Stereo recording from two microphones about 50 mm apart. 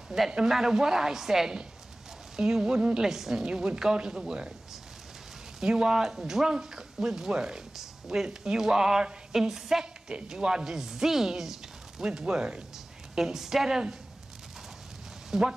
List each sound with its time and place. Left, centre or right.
0.1 s speech: centre
5.6 s speech: centre
15.3 s speech: centre